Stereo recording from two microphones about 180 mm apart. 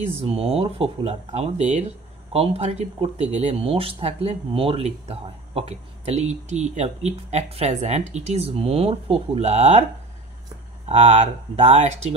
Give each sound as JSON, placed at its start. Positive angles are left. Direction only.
{"t": 0.2, "sound": "speech", "side_deg": -35}
{"t": 10.9, "sound": "speech", "side_deg": -35}